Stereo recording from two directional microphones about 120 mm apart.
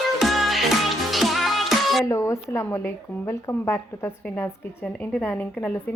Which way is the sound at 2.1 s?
25° left (ahead or behind).